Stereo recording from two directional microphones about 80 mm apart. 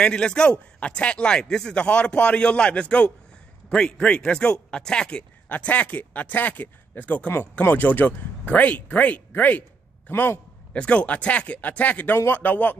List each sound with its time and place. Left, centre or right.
0.0 s a man's voice: centre; by 10.4 s left
10.7 s a man's voice: centre